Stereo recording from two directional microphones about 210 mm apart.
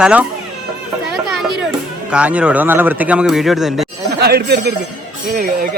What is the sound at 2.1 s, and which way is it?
Speech, 5° right (ahead or behind).